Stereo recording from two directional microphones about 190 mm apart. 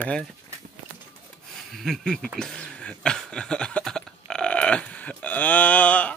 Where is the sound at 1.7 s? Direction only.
Centre (ahead or behind).